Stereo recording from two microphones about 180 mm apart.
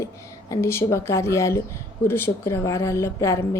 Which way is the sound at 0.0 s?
20° left (ahead or behind).